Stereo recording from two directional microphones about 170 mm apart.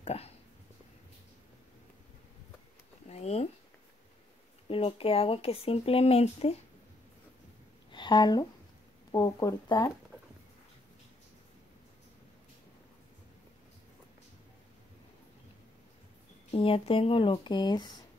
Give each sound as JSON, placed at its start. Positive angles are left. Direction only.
{"t": 0.0, "sound": "speech", "side_deg": 35}
{"t": 3.1, "sound": "a sound", "side_deg": 40}
{"t": 4.6, "sound": "speech", "side_deg": 35}
{"t": 7.9, "sound": "speech", "side_deg": 25}
{"t": 16.5, "sound": "speech", "side_deg": 35}